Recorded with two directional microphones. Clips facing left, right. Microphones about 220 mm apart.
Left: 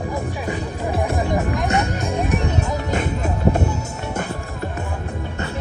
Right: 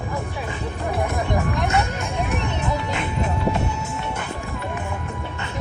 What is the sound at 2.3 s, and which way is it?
Music, 40° left (ahead or behind).